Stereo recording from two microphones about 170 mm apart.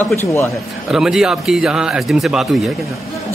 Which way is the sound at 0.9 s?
5° right (ahead or behind).